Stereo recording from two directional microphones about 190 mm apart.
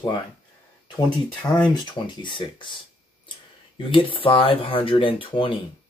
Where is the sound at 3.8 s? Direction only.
25° left (ahead or behind).